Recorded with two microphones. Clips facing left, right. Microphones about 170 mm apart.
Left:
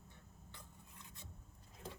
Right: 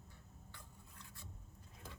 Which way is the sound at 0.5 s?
20° left (ahead or behind).